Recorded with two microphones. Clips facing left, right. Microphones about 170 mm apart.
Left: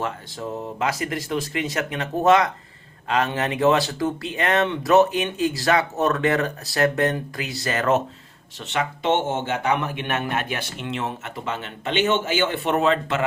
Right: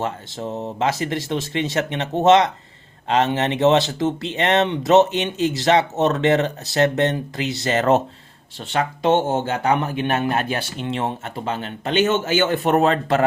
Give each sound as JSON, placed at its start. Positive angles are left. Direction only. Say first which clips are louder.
{"t": 0.0, "sound": "speech", "louder": "right 2 dB", "side_deg": -25}